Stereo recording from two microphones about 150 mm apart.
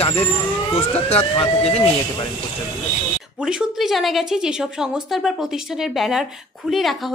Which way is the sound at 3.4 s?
5° right (ahead or behind).